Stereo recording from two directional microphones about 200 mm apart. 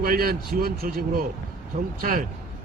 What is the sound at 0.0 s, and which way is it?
Speech, 45° right (ahead or behind).